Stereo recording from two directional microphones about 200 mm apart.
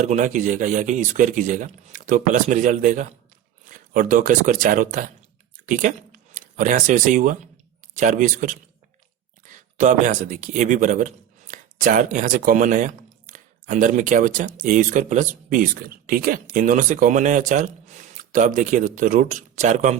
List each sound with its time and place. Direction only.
0.0 s speech: 40° right (ahead or behind)